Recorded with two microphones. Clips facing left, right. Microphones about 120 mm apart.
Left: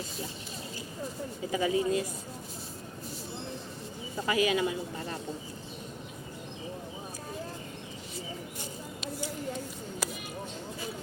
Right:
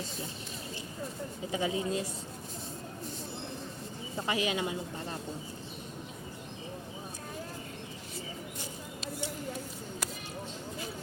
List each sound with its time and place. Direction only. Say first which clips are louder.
1.5 s speech: left 4 dB; 25° right (ahead or behind)
4.3 s speech: left 5 dB; 25° right (ahead or behind)